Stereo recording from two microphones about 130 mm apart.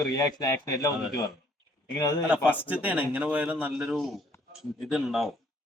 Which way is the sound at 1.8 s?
30° left (ahead or behind).